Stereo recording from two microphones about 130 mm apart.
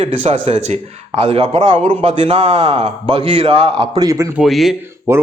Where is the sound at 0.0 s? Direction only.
55° right (ahead or behind).